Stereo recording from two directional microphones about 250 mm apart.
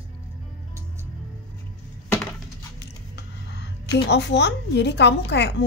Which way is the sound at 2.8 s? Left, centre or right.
Left.